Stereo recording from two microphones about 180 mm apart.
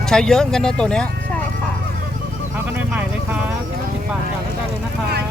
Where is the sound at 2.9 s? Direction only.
5° right (ahead or behind).